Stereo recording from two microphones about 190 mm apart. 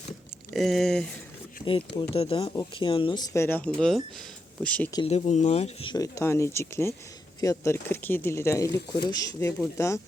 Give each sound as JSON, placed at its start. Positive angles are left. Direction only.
{"t": 0.5, "sound": "speech", "side_deg": 0}
{"t": 2.0, "sound": "speech", "side_deg": 30}
{"t": 3.3, "sound": "speech", "side_deg": 10}
{"t": 5.0, "sound": "speech", "side_deg": 35}